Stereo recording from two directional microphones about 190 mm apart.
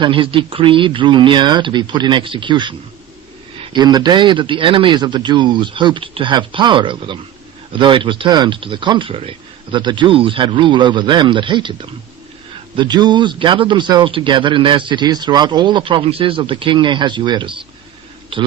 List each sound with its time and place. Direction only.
0.0 s a man's voice: 25° right (ahead or behind)